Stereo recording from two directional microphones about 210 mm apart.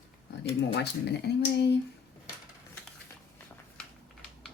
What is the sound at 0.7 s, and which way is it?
Speech, 55° left (ahead or behind).